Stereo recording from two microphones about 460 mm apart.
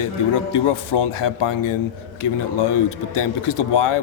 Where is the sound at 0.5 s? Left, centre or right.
Left.